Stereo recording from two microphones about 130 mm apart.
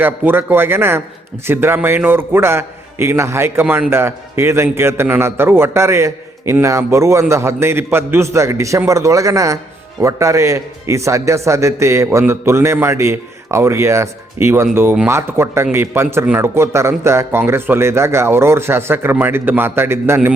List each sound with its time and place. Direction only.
0.0 s a man's voice: 15° right (ahead or behind)